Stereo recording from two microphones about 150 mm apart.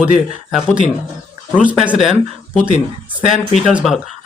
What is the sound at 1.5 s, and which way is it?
Speech, 10° right (ahead or behind).